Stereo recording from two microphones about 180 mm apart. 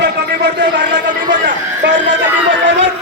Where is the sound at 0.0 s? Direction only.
65° right (ahead or behind).